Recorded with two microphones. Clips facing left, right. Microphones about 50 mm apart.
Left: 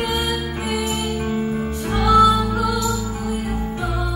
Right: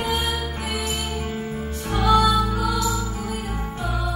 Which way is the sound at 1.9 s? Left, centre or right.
Left.